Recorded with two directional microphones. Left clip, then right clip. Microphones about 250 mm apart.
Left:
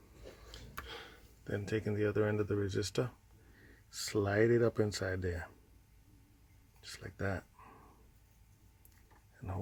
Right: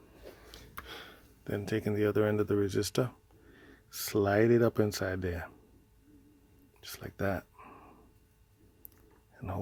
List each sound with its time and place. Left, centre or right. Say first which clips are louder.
0.9 s speech: right 2 dB; right
6.8 s speech: right 6 dB; right